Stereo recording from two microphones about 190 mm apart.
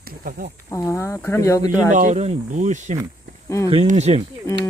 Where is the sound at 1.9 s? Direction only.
40° right (ahead or behind).